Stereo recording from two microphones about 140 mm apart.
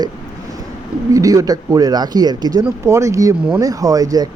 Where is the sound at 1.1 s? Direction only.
25° right (ahead or behind).